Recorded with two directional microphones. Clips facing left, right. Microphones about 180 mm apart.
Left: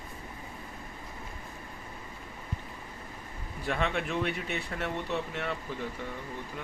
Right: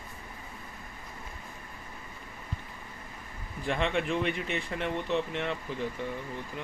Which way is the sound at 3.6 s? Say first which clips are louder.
Right 2 dB; 5° left (ahead or behind).